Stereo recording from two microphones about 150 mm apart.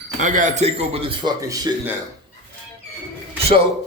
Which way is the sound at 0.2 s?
55° right (ahead or behind).